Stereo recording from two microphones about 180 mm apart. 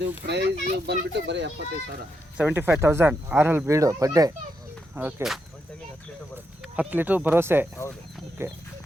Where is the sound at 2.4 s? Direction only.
10° right (ahead or behind).